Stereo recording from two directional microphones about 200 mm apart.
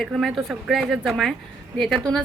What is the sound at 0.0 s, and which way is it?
Speech, centre (ahead or behind).